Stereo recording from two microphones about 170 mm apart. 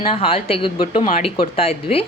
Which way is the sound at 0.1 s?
35° left (ahead or behind).